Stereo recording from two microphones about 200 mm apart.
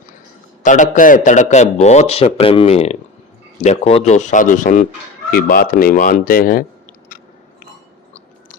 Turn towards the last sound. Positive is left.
turn(degrees=45)  # may be behind; listen again after turning